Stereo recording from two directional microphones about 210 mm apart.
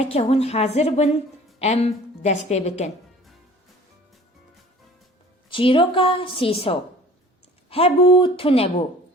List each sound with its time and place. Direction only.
0.0 s a woman's voice: 30° left (ahead or behind)
5.5 s a woman's voice: 25° left (ahead or behind)